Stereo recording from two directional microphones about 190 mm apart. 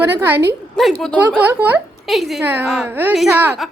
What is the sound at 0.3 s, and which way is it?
Speech, 10° right (ahead or behind).